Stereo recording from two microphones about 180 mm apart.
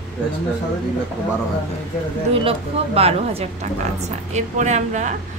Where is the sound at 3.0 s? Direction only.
35° right (ahead or behind).